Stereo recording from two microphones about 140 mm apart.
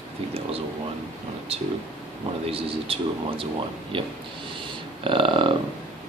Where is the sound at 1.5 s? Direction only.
45° right (ahead or behind).